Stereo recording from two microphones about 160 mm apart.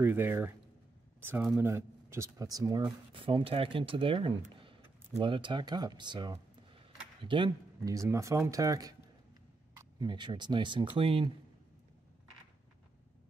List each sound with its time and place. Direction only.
0.0 s speech: 15° right (ahead or behind); by 11.3 s 35° right (ahead or behind)